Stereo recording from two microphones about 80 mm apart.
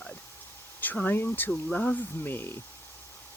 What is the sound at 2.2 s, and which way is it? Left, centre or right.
Speech, left.